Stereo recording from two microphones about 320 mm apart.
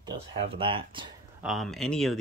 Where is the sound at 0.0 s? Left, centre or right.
Centre.